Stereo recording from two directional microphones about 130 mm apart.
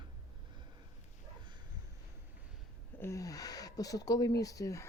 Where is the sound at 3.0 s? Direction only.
25° left (ahead or behind).